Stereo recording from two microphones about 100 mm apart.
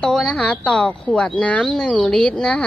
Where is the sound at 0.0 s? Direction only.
5° left (ahead or behind).